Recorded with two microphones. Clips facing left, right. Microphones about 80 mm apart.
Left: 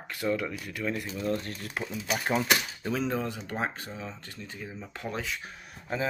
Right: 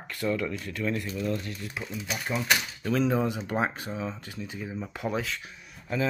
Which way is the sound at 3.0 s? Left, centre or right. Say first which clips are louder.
Right 5 dB; centre.